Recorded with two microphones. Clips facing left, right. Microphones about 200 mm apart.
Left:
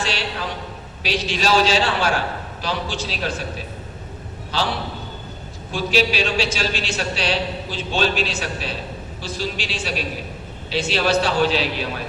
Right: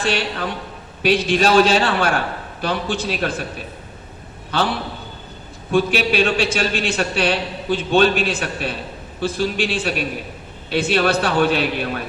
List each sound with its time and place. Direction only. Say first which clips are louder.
0.0 s a man's voice: right 4 dB; 55° right (ahead or behind)
4.5 s a man's voice: right 3 dB; 55° right (ahead or behind)
5.7 s a man's voice: right 3 dB; 55° right (ahead or behind)